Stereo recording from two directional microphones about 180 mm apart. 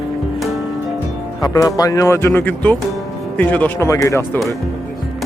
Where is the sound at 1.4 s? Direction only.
20° left (ahead or behind).